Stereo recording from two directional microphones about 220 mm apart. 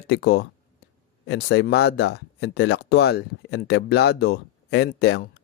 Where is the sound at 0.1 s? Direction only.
50° left (ahead or behind).